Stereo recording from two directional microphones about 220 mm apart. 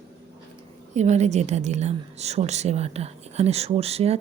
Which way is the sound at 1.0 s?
30° right (ahead or behind).